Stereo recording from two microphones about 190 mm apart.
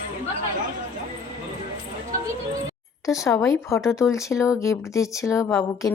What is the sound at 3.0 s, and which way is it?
Speech, 15° left (ahead or behind).